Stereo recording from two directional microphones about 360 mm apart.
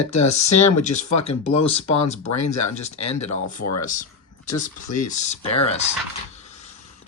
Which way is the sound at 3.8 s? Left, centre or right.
Left.